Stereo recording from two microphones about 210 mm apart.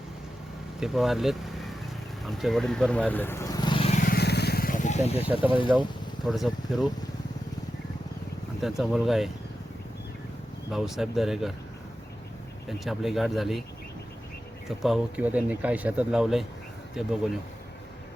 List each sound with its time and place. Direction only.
0.8 s speech: centre (ahead or behind); by 4.0 s 25° left (ahead or behind)
4.0 s vehicle: 50° left (ahead or behind); by 5.4 s 30° left (ahead or behind)
5.5 s speech: 25° left (ahead or behind)
6.2 s speech: centre (ahead or behind)
8.8 s speech: centre (ahead or behind)
10.7 s speech: centre (ahead or behind)
12.6 s speech: centre (ahead or behind)
14.8 s speech: centre (ahead or behind)